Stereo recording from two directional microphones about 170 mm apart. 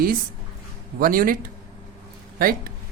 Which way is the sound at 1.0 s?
55° right (ahead or behind).